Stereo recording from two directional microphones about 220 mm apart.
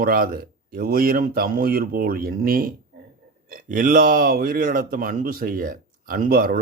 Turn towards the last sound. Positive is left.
turn(degrees=-40)  # may be behind; listen again after turning